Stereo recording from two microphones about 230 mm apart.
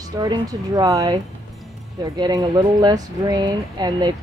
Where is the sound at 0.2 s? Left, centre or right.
Centre.